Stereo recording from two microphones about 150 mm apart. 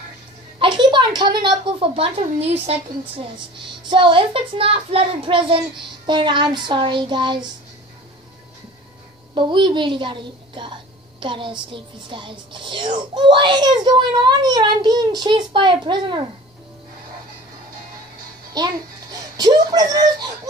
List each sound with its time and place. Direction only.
0.6 s a woman's voice: 30° right (ahead or behind)
9.3 s a child's voice: 30° right (ahead or behind)
18.6 s speech: 25° right (ahead or behind)